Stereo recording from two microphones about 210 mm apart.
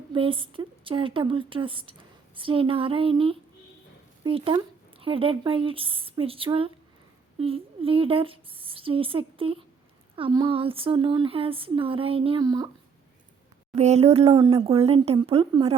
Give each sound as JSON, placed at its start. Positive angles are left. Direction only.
{"t": 0.1, "sound": "a woman's voice", "side_deg": -25}
{"t": 13.7, "sound": "a woman's voice", "side_deg": -30}